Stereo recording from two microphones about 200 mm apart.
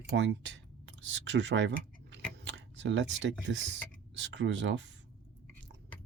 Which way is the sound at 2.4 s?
60° right (ahead or behind).